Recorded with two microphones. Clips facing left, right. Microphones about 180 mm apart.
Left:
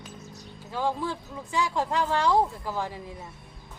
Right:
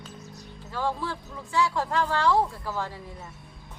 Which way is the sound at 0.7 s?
15° left (ahead or behind).